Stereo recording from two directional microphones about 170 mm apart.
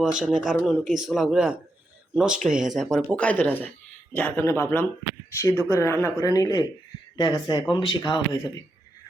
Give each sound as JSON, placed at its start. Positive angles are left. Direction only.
{"t": 0.0, "sound": "speech", "side_deg": -5}